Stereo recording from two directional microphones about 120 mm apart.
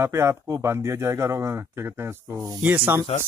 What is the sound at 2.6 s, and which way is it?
Speech, 15° right (ahead or behind).